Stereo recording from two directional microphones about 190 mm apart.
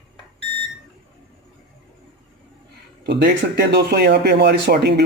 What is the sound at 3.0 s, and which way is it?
Speech, 60° right (ahead or behind).